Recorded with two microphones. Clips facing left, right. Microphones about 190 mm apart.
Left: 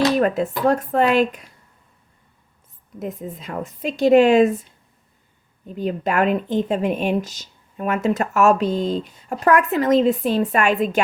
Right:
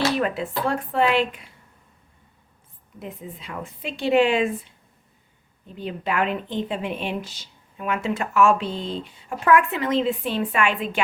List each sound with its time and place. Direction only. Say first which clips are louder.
0.2 s speech: left 6 dB; 45° left (ahead or behind)
3.0 s speech: left 7 dB; 45° left (ahead or behind)